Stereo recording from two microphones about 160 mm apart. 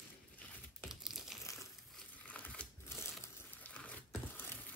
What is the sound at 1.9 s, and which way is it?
Crumpling, 10° left (ahead or behind).